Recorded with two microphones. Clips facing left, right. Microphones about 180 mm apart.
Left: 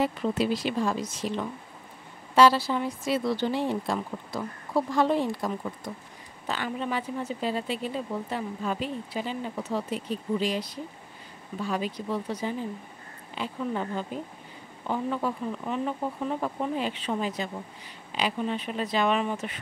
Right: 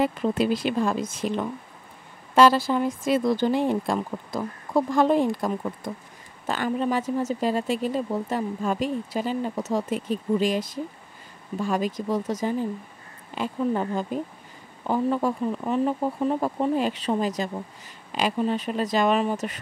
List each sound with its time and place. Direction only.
0.0 s speech: 50° right (ahead or behind)